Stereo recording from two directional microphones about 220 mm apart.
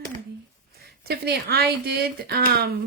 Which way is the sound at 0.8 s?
45° right (ahead or behind).